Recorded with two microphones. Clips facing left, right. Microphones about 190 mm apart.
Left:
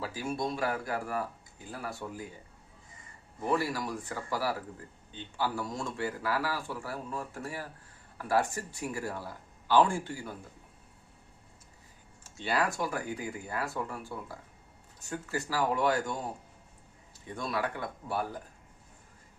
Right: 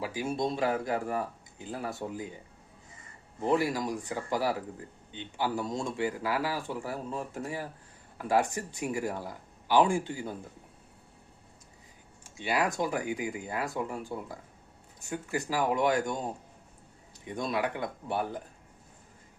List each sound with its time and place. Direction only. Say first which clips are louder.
0.0 s speech: right 3 dB; 15° right (ahead or behind)
3.4 s speech: right 3 dB; 20° right (ahead or behind)
12.2 s speech: right 1 dB; 15° right (ahead or behind)
17.2 s speech: right 3 dB; 20° right (ahead or behind)